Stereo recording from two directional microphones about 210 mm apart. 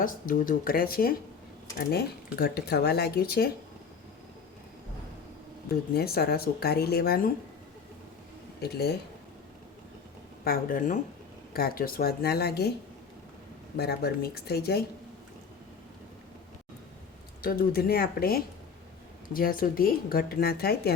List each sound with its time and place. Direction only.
0.0 s speech: 40° left (ahead or behind)
5.9 s speech: 45° left (ahead or behind)
8.6 s speech: 50° left (ahead or behind)
10.4 s speech: 45° left (ahead or behind)
13.7 s speech: 50° left (ahead or behind)
17.4 s speech: 45° left (ahead or behind)